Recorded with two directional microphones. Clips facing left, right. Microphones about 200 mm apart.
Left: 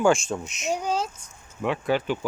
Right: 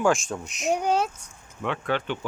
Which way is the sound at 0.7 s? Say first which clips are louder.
Right 3 dB; 65° right (ahead or behind).